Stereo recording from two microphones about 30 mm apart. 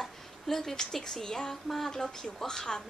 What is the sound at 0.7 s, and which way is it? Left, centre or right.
Speech, left.